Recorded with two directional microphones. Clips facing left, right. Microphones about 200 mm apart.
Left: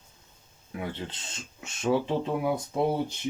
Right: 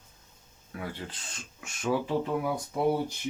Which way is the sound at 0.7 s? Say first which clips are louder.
Left 3 dB; 25° left (ahead or behind).